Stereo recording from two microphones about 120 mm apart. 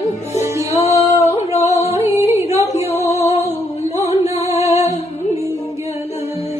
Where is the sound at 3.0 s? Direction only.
65° left (ahead or behind).